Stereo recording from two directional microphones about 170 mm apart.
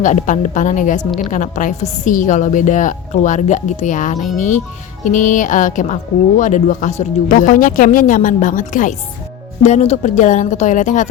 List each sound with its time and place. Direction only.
0.0 s speech: 50° left (ahead or behind)